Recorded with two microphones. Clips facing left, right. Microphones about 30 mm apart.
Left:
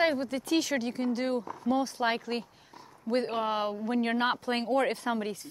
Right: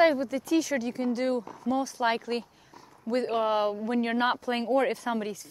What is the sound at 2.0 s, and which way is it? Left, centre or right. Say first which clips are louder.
Speech: right 2 dB; centre.